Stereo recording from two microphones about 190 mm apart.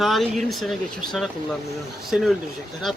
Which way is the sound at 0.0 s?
Centre (ahead or behind).